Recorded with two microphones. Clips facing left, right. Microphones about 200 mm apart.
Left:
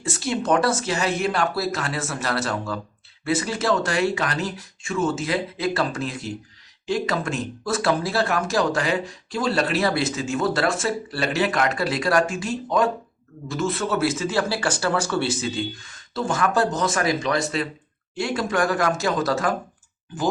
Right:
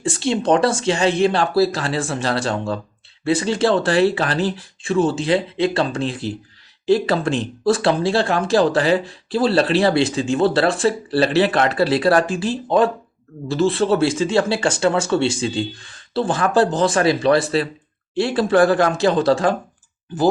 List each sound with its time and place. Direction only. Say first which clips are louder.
0.0 s speech: right 5 dB; 30° right (ahead or behind)